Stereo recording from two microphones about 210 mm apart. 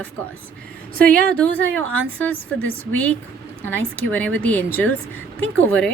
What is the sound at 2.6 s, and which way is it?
Speech, 80° right.